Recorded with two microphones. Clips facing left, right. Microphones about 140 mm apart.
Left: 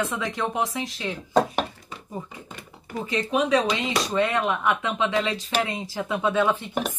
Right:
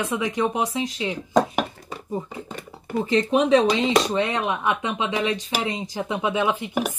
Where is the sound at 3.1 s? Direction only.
30° right (ahead or behind).